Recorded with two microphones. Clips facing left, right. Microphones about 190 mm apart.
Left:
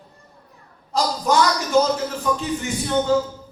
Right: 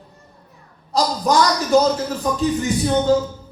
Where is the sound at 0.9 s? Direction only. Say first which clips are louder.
Right 2 dB; 35° right (ahead or behind).